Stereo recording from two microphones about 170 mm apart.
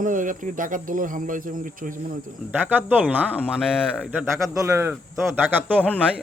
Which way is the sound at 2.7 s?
10° right (ahead or behind).